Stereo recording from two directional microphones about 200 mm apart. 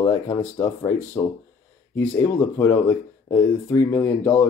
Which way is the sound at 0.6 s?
15° left (ahead or behind).